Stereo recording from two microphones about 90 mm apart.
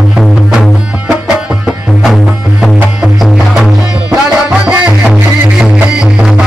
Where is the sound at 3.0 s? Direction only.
5° right (ahead or behind).